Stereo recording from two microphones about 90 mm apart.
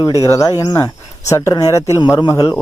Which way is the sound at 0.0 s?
40° left (ahead or behind).